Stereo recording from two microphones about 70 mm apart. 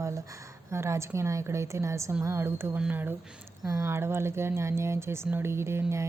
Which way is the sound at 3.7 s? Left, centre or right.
Right.